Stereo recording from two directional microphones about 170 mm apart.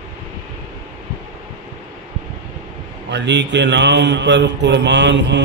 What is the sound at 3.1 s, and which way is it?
Speech, 90° right.